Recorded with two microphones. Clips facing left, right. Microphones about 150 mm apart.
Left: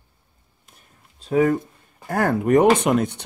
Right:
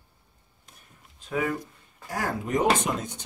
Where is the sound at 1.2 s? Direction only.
40° left (ahead or behind).